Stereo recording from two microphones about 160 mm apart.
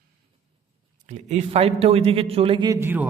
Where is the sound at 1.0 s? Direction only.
50° right (ahead or behind); by 2.7 s 30° right (ahead or behind).